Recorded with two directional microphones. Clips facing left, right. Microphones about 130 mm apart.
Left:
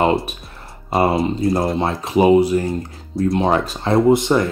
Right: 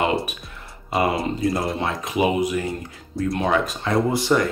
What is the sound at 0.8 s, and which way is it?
Speech, 35° left (ahead or behind).